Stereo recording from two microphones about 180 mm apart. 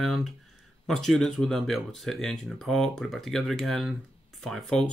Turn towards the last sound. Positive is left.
turn(degrees=5)  # may be behind; listen again after turning